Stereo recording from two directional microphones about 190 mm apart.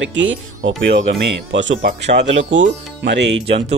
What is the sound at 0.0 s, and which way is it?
Speech, 80° right.